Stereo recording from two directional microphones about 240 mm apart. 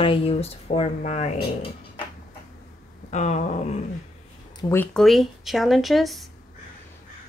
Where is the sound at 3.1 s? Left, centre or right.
Left.